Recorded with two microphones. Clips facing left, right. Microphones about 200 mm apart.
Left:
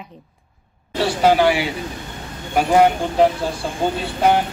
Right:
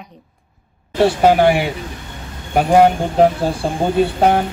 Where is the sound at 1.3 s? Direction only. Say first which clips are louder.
Even; 50° right (ahead or behind).